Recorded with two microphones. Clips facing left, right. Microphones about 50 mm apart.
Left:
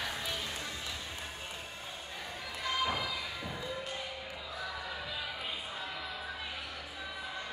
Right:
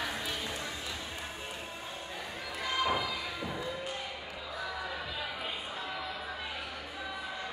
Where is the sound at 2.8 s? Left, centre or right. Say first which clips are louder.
Right 3 dB; centre.